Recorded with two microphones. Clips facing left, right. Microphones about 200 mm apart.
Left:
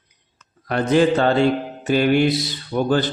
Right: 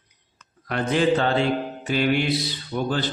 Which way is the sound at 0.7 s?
40° left (ahead or behind).